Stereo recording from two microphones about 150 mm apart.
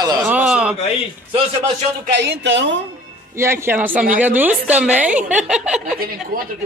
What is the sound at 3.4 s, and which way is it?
A woman's voice, 15° right (ahead or behind).